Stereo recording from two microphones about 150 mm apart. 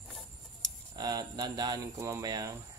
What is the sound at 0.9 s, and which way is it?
Speech, 25° right (ahead or behind).